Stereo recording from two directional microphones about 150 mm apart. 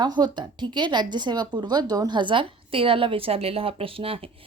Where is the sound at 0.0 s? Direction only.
30° right (ahead or behind).